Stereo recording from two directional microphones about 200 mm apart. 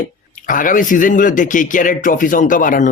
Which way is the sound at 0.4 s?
40° left (ahead or behind).